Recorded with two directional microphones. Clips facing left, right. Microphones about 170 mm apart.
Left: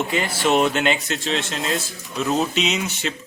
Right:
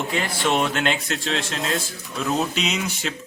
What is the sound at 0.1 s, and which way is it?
Speech, 5° left (ahead or behind).